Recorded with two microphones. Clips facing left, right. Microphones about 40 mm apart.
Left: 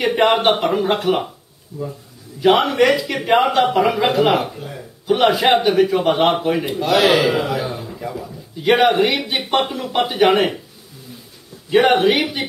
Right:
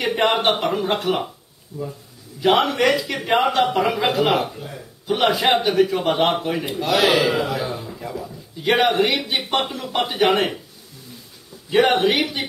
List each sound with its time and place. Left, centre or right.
0.0 s a man's voice: centre
1.7 s speech: centre
2.4 s a man's voice: centre
11.7 s a man's voice: centre